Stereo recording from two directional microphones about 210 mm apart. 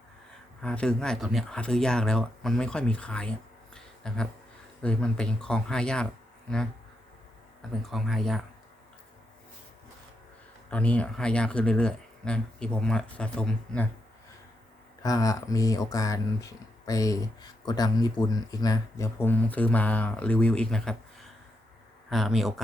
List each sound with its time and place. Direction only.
0.6 s speech: 5° left (ahead or behind)
7.8 s speech: centre (ahead or behind)
10.7 s speech: 5° left (ahead or behind)
15.0 s speech: 15° left (ahead or behind)
22.1 s speech: centre (ahead or behind)